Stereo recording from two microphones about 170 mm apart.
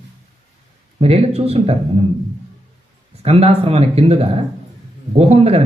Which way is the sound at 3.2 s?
35° right (ahead or behind).